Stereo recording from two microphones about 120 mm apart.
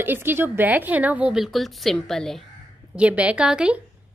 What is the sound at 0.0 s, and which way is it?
A woman's voice, 15° right (ahead or behind).